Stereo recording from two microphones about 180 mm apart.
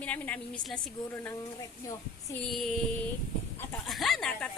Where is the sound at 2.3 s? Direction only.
Centre (ahead or behind).